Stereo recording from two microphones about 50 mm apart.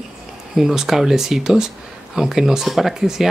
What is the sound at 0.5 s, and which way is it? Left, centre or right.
Speech, centre.